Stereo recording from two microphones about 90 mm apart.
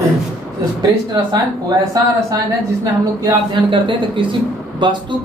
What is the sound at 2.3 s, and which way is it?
Speech, 45° right (ahead or behind).